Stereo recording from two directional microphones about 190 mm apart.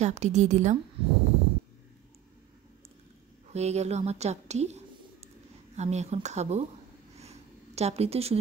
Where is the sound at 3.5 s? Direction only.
35° right (ahead or behind).